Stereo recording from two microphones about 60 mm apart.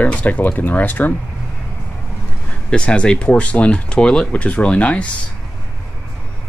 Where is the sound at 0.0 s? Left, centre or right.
Left.